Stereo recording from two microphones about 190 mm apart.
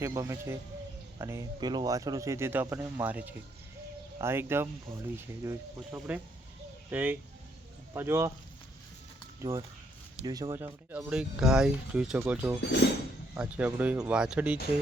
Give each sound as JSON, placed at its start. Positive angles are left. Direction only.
{"t": 0.0, "sound": "speech", "side_deg": -15}
{"t": 9.4, "sound": "speech", "side_deg": -15}